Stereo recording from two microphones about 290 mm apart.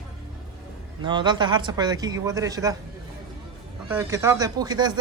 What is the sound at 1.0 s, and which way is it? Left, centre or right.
Speech, centre.